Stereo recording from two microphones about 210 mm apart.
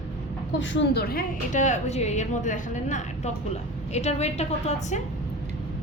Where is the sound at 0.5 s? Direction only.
55° left (ahead or behind); by 5.0 s 30° left (ahead or behind).